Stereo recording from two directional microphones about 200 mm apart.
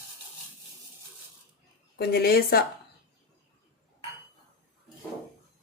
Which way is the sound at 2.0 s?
50° left (ahead or behind).